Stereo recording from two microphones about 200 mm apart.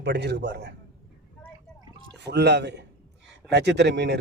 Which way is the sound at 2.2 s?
55° right (ahead or behind).